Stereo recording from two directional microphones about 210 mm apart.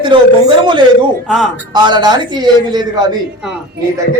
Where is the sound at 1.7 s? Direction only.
20° right (ahead or behind).